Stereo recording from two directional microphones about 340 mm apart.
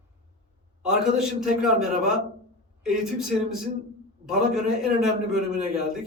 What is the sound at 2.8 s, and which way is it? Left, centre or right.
Speech, centre.